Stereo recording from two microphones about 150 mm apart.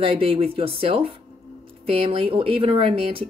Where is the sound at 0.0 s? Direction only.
35° right (ahead or behind).